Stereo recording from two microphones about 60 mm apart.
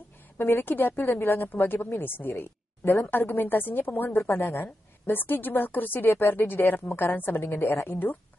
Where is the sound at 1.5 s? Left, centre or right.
Left.